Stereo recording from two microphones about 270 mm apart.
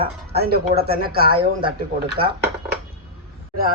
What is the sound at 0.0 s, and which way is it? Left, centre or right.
Speech, right.